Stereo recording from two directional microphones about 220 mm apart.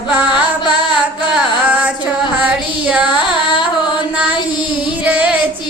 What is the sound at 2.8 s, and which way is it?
Carnatic music, 5° right (ahead or behind).